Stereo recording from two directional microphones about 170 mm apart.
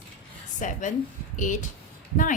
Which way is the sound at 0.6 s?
50° left (ahead or behind).